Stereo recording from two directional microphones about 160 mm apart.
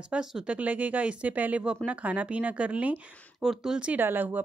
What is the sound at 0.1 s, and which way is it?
Speech, 5° right (ahead or behind).